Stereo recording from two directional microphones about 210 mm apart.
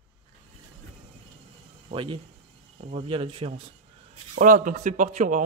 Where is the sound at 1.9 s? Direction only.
25° right (ahead or behind).